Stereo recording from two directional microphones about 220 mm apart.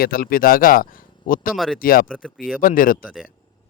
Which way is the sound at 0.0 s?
40° left (ahead or behind).